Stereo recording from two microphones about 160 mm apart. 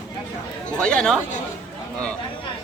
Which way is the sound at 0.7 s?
5° left (ahead or behind).